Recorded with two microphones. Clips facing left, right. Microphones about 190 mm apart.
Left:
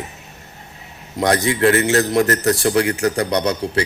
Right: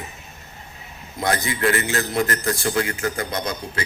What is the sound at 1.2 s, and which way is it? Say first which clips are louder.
Speech: left 6 dB; 75° left (ahead or behind).